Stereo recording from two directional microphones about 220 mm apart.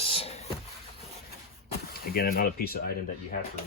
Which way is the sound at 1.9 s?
45° left (ahead or behind).